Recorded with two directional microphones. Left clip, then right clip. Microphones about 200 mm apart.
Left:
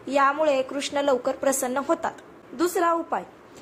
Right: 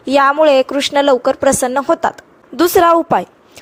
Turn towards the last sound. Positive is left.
turn(degrees=-50)  # may be behind; listen again after turning